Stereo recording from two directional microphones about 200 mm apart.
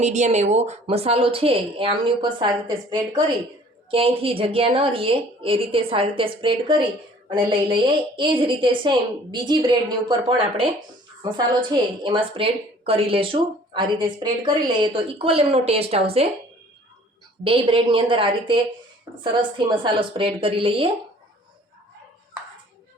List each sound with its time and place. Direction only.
0.0 s a woman's voice: 35° right (ahead or behind)
17.4 s a woman's voice: 25° right (ahead or behind)